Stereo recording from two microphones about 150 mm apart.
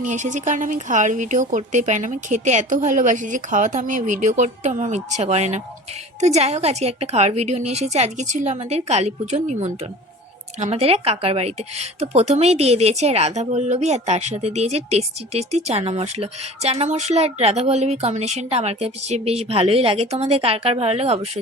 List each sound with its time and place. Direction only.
0.0 s a woman's voice: 55° right (ahead or behind)